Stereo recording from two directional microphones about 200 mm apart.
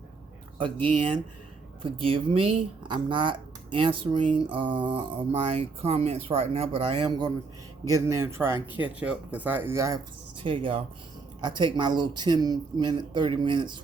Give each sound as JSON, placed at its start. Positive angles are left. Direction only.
{"t": 0.6, "sound": "speech", "side_deg": -25}
{"t": 10.4, "sound": "speech", "side_deg": -25}